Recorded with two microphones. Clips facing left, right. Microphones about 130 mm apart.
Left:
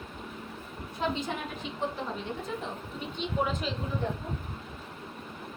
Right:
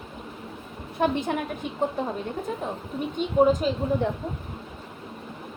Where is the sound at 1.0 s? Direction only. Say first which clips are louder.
Right 7 dB; 55° right (ahead or behind).